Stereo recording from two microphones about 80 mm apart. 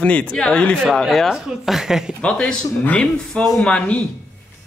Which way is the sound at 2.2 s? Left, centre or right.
Centre.